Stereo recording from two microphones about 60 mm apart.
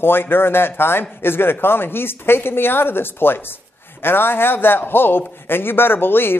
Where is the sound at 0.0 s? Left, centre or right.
Left.